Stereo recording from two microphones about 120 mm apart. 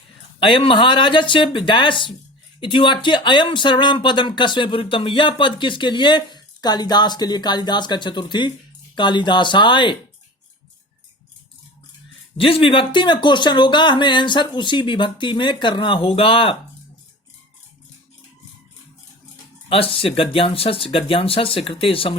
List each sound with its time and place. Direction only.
0.3 s speech: 45° left (ahead or behind)
12.4 s speech: 50° left (ahead or behind)
19.6 s speech: 50° left (ahead or behind)